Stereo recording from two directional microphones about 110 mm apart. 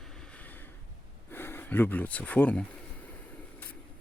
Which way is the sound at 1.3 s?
20° left (ahead or behind).